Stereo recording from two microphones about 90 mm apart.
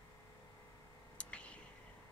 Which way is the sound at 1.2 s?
15° left (ahead or behind).